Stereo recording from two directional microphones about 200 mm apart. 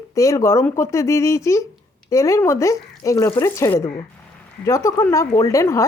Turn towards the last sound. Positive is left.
turn(degrees=15)  # may be behind; listen again after turning